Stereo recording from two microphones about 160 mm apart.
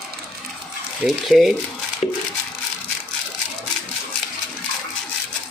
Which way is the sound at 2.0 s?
45° left (ahead or behind).